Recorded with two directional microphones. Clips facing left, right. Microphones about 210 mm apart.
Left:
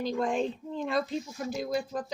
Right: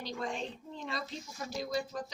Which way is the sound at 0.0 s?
50° left (ahead or behind).